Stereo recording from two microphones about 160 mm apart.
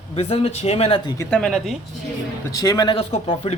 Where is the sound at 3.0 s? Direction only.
35° left (ahead or behind).